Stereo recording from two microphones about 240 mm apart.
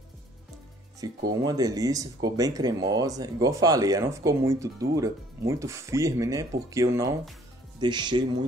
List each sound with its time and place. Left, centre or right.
1.0 s speech: centre